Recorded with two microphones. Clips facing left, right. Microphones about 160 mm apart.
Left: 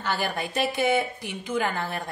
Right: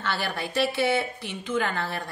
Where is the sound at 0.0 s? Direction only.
15° left (ahead or behind).